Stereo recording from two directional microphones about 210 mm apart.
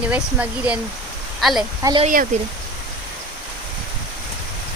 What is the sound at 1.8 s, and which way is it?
Speech, 20° right (ahead or behind).